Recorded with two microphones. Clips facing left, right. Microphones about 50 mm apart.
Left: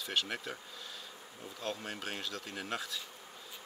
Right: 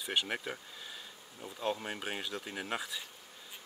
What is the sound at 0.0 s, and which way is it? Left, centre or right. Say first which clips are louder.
Speech: right 2 dB; centre.